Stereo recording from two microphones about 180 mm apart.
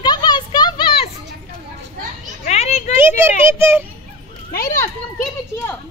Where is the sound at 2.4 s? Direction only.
40° left (ahead or behind).